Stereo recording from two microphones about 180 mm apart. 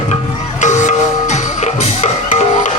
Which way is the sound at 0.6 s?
40° left (ahead or behind).